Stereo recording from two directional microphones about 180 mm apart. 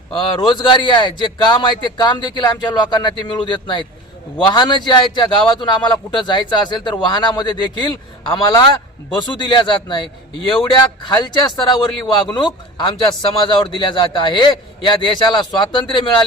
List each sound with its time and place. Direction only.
0.2 s a man's voice: 25° left (ahead or behind)
9.1 s a man's voice: 25° left (ahead or behind)